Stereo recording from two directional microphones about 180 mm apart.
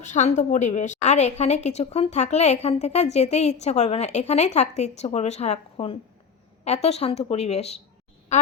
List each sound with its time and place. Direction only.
0.0 s a woman's voice: 40° left (ahead or behind)